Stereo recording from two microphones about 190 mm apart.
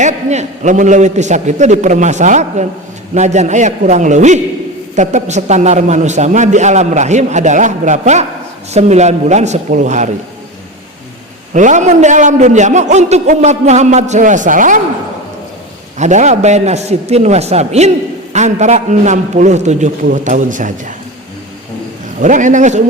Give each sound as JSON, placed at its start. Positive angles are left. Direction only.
{"t": 0.0, "sound": "a man's voice", "side_deg": -40}
{"t": 11.5, "sound": "a man's voice", "side_deg": -40}
{"t": 16.0, "sound": "a man's voice", "side_deg": -40}
{"t": 22.2, "sound": "a man's voice", "side_deg": -40}